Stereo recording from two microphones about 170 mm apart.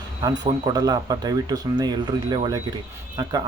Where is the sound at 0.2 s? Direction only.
25° right (ahead or behind).